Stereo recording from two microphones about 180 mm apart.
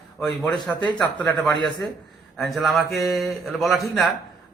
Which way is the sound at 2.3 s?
Centre (ahead or behind).